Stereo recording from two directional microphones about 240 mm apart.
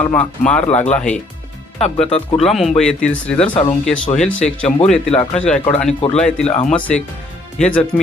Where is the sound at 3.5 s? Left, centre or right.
Left.